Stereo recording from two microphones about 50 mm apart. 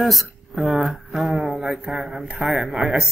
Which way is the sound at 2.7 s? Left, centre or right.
Centre.